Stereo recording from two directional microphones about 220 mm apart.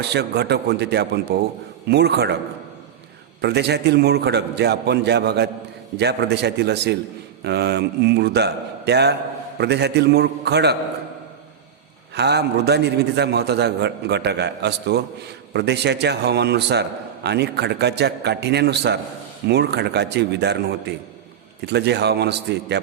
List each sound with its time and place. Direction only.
0.0 s a man's voice: 50° right (ahead or behind)
3.4 s a man's voice: 50° right (ahead or behind)
12.1 s a man's voice: 50° right (ahead or behind)